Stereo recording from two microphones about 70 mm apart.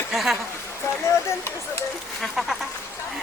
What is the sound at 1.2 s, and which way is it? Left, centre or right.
Speech, left.